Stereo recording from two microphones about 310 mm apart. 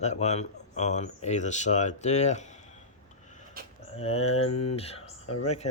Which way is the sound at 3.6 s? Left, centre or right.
Right.